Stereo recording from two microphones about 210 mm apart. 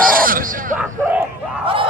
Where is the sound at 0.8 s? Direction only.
5° right (ahead or behind).